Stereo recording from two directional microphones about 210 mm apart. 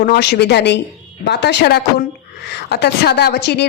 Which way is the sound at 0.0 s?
50° left (ahead or behind).